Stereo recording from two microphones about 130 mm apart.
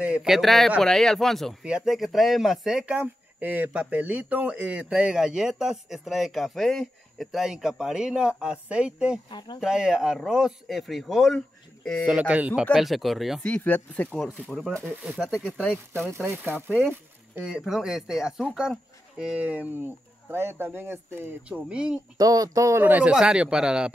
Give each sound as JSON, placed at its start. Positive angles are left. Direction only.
{"t": 0.0, "sound": "speech", "side_deg": -5}
{"t": 12.1, "sound": "speech", "side_deg": -10}
{"t": 13.5, "sound": "speech", "side_deg": 15}
{"t": 14.4, "sound": "speech", "side_deg": -5}
{"t": 16.3, "sound": "speech", "side_deg": -15}
{"t": 17.6, "sound": "speech", "side_deg": -5}
{"t": 22.1, "sound": "speech", "side_deg": -30}